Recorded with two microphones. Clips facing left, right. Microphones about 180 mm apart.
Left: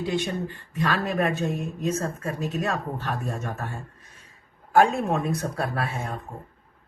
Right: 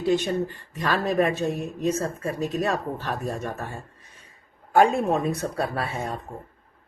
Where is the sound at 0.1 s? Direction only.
40° right (ahead or behind).